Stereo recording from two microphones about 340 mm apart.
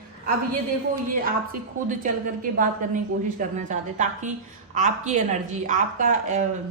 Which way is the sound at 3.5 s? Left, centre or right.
Right.